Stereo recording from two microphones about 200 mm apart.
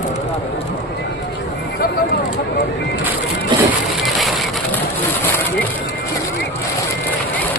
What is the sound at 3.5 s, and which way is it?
Crushing, 25° right (ahead or behind).